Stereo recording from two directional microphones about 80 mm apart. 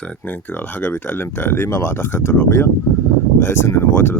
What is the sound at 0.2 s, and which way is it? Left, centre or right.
Speech, left.